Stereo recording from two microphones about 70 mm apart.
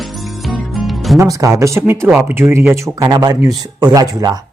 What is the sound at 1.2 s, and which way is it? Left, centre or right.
Speech, right.